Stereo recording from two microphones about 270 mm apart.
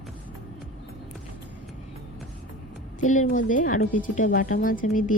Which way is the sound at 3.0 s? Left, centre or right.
Left.